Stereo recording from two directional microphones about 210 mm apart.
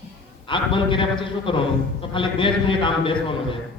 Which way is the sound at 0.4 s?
25° left (ahead or behind).